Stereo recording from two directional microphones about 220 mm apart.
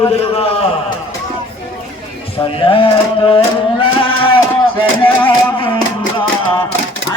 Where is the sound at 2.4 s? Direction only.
25° left (ahead or behind).